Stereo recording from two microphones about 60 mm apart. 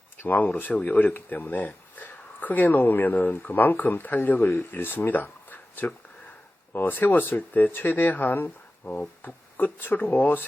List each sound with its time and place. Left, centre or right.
0.3 s speech: left